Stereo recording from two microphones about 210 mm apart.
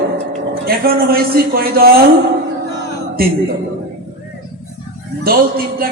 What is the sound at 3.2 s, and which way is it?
Speech, 45° right (ahead or behind).